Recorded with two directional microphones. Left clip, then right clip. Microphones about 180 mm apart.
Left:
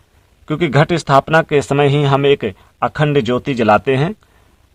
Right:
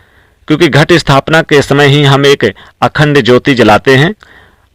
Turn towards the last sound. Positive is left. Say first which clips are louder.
# right 7 dB
turn(degrees=-25)  # may be behind; listen again after turning